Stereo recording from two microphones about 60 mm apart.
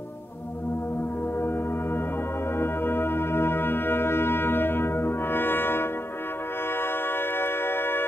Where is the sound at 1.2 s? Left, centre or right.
Left.